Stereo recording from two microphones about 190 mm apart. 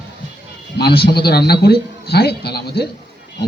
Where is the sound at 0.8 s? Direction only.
55° left (ahead or behind).